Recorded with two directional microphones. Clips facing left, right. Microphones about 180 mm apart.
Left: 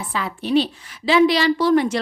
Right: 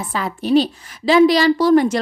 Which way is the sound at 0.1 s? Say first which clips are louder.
Right 4 dB; 40° right (ahead or behind).